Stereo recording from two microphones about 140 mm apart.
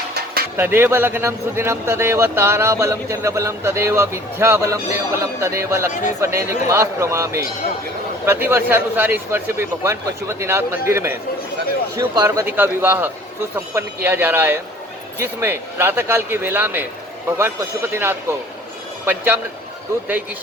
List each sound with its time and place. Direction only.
0.5 s a man's voice: 15° right (ahead or behind)
5.9 s speech: 60° left (ahead or behind)
6.1 s a man's voice: 20° right (ahead or behind)